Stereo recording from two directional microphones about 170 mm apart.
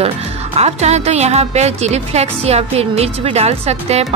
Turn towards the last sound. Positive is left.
turn(degrees=-40)  # may be behind; listen again after turning